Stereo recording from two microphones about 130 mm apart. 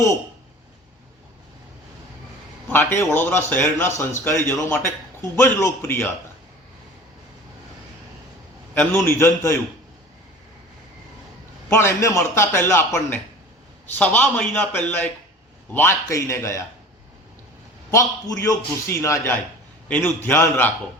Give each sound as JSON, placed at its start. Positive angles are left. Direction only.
{"t": 2.7, "sound": "a man's voice", "side_deg": 20}
{"t": 8.7, "sound": "a man's voice", "side_deg": 20}
{"t": 11.7, "sound": "a man's voice", "side_deg": 20}
{"t": 13.9, "sound": "a man's voice", "side_deg": 15}
{"t": 17.9, "sound": "a man's voice", "side_deg": 25}